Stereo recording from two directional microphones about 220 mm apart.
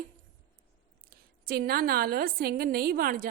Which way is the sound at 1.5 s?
45° right (ahead or behind).